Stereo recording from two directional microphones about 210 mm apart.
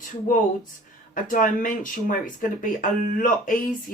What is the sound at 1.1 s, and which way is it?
Speech, 40° left (ahead or behind).